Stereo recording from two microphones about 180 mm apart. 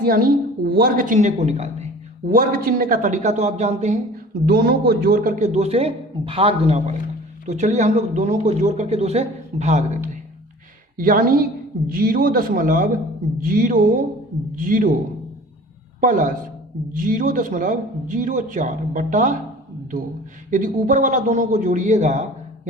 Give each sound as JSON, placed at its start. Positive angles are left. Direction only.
{"t": 0.0, "sound": "a woman's voice", "side_deg": -55}
{"t": 4.4, "sound": "speech", "side_deg": -60}
{"t": 10.9, "sound": "a woman's voice", "side_deg": -50}
{"t": 16.0, "sound": "a man's voice", "side_deg": -45}
{"t": 20.5, "sound": "a woman's voice", "side_deg": -45}